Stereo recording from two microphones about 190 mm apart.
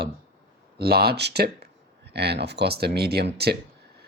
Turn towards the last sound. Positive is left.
turn(degrees=-55)  # may be behind; listen again after turning